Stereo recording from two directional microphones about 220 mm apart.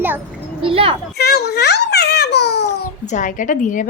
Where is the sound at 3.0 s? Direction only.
35° left (ahead or behind).